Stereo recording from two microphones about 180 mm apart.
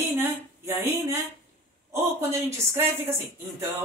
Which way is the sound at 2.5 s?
15° right (ahead or behind).